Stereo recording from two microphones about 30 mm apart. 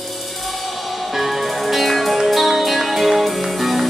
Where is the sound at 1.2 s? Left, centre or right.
Centre.